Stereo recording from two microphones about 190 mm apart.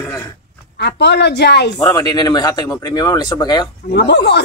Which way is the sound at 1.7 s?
20° left (ahead or behind).